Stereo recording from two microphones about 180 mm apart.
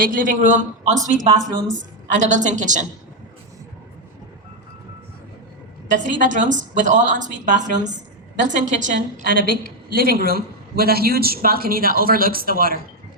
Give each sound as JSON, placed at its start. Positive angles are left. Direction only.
{"t": 0.0, "sound": "a woman's voice", "side_deg": -50}
{"t": 5.9, "sound": "a woman's voice", "side_deg": -45}